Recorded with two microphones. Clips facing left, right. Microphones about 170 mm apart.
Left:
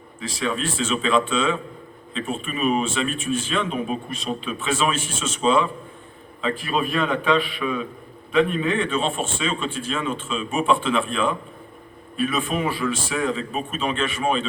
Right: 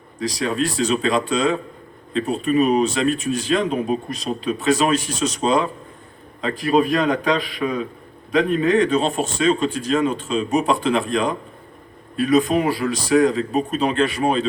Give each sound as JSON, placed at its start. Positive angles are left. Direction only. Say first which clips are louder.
{"t": 0.2, "sound": "speech", "louder": "right 4 dB", "side_deg": -40}